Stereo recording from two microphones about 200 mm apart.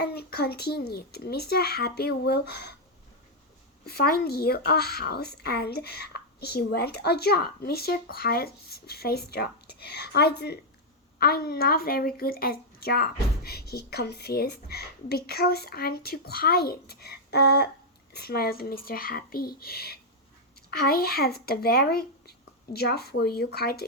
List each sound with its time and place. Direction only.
0.0 s speech: 55° left (ahead or behind)
3.8 s speech: 50° left (ahead or behind)